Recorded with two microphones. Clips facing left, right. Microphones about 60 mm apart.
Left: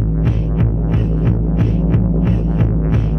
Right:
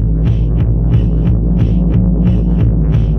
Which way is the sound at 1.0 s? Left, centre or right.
Left.